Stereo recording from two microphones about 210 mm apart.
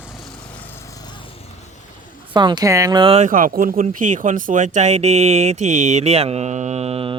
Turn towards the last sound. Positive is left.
turn(degrees=-30)  # may be behind; listen again after turning